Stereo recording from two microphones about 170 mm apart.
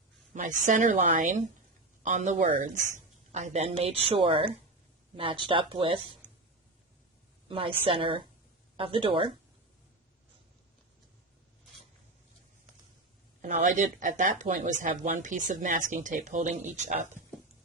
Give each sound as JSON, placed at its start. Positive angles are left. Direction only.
{"t": 0.3, "sound": "a woman's voice", "side_deg": -50}
{"t": 7.4, "sound": "a woman's voice", "side_deg": -30}
{"t": 13.4, "sound": "speech", "side_deg": -45}